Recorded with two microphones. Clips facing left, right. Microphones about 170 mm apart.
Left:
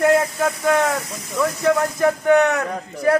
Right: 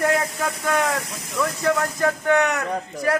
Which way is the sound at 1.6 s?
15° left (ahead or behind).